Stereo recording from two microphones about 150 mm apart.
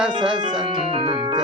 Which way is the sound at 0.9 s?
35° right (ahead or behind).